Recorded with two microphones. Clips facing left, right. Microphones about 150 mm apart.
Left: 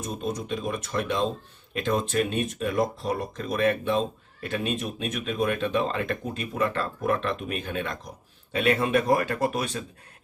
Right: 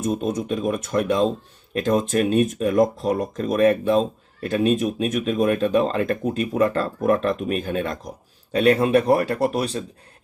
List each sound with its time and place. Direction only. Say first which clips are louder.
0.0 s speech: right 7 dB; 50° right (ahead or behind); by 9.8 s 35° right (ahead or behind)